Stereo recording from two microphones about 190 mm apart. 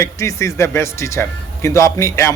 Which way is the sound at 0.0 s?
15° left (ahead or behind).